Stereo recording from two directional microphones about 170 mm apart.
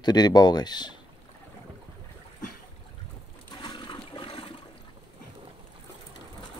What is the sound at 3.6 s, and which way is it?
Toilet flush, 30° left (ahead or behind).